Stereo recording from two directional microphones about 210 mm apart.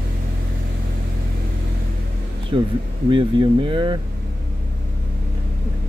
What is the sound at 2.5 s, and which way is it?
Speech, 25° right (ahead or behind).